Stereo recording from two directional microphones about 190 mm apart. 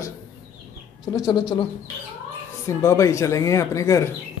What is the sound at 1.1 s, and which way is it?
Speech, 20° left (ahead or behind).